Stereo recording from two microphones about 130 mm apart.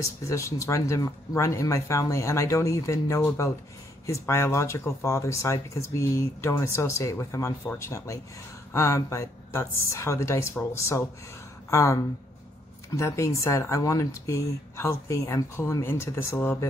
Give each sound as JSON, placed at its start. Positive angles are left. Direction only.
{"t": 0.0, "sound": "speech", "side_deg": 25}